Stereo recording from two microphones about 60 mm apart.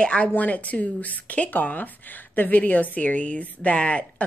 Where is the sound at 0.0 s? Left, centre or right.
Centre.